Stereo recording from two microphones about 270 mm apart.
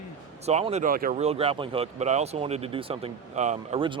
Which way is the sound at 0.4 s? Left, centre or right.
Right.